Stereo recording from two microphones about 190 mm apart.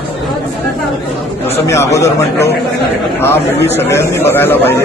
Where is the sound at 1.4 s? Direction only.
15° left (ahead or behind).